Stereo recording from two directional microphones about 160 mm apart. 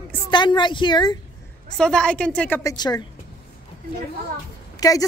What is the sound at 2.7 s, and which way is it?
Speech, 25° left (ahead or behind).